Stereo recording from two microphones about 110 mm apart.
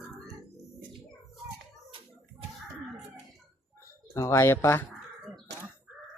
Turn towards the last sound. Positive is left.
turn(degrees=20)  # may be behind; listen again after turning